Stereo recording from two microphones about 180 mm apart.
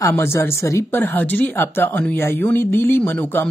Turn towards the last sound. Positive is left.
turn(degrees=10)  # may be behind; listen again after turning